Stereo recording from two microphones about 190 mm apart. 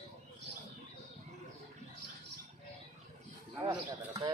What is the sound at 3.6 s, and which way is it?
Bird, 20° right (ahead or behind).